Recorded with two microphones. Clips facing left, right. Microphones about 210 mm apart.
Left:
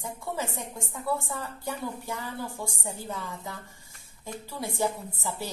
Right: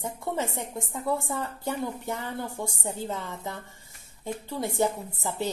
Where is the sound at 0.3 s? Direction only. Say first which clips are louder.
Right 3 dB; 20° right (ahead or behind).